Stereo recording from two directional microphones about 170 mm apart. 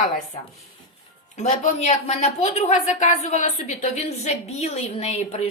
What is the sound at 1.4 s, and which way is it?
A woman's voice, 40° left (ahead or behind).